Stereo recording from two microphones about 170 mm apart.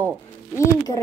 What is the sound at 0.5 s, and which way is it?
Speech, 20° left (ahead or behind).